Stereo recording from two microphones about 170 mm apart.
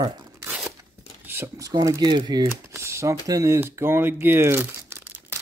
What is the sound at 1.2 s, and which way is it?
Speech, 15° right (ahead or behind).